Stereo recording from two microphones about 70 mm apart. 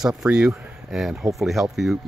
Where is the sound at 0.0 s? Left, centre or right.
Centre.